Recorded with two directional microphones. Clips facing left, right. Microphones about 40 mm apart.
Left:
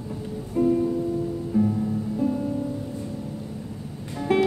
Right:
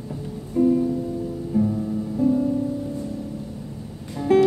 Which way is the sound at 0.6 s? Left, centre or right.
Centre.